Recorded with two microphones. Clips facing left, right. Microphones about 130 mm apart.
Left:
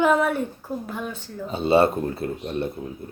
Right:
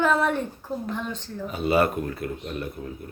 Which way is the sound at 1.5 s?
30° left (ahead or behind).